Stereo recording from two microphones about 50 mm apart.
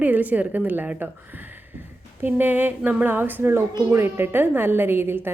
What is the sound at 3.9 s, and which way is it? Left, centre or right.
A woman's voice, right.